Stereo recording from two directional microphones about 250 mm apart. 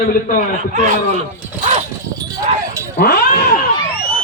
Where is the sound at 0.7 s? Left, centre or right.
Right.